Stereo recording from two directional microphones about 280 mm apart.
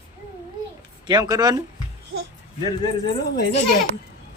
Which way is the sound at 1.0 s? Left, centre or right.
Centre.